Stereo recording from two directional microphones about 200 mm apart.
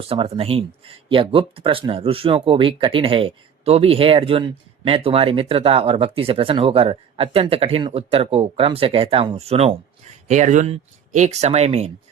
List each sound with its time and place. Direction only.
0.0 s speech: 30° right (ahead or behind)